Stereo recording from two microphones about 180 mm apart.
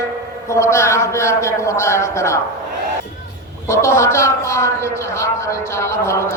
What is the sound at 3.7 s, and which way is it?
A man's voice, 15° left (ahead or behind).